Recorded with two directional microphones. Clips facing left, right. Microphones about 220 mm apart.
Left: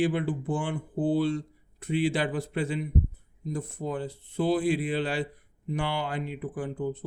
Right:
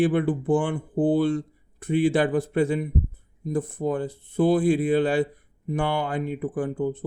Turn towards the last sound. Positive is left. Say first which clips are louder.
# right 5 dB
turn(degrees=-50)  # may be behind; listen again after turning